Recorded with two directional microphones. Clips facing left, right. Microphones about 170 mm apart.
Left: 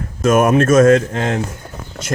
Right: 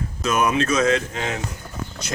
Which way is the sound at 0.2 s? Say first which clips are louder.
Left 8 dB; 50° left (ahead or behind).